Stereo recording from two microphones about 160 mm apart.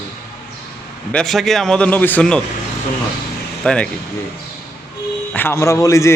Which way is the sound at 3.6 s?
5° left (ahead or behind).